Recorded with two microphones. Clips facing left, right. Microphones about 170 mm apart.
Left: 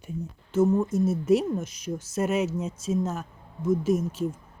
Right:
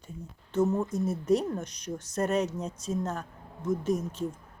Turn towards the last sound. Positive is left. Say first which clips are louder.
# left 4 dB
turn(degrees=5)  # may be behind; listen again after turning